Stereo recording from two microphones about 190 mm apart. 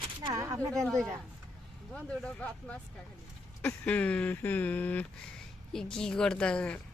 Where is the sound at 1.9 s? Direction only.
5° left (ahead or behind).